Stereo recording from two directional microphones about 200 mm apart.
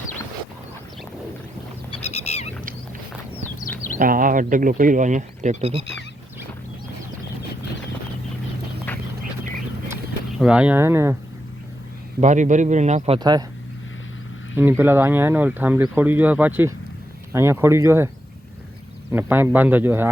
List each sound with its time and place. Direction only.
2.0 s a sound: 35° left (ahead or behind)
3.9 s speech: 45° right (ahead or behind)
8.9 s a sound: 10° left (ahead or behind)
9.9 s speech: 5° right (ahead or behind)
12.2 s speech: 40° right (ahead or behind)
13.1 s speech: 20° right (ahead or behind)
14.5 s speech: 10° right (ahead or behind)
19.1 s speech: 10° right (ahead or behind)